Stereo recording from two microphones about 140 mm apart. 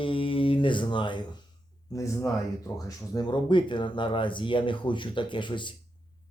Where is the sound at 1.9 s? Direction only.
20° left (ahead or behind).